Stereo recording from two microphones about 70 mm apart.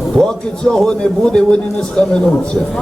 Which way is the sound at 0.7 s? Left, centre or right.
Centre.